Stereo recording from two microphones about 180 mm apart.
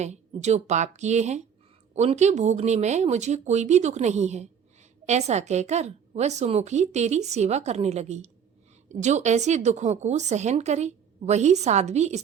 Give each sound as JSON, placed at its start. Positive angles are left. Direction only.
{"t": 0.0, "sound": "speech", "side_deg": -40}